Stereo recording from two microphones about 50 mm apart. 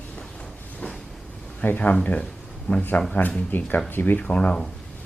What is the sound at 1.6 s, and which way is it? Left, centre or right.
Speech, left.